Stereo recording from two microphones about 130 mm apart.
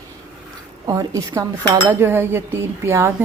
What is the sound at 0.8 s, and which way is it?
A woman's voice, 25° right (ahead or behind).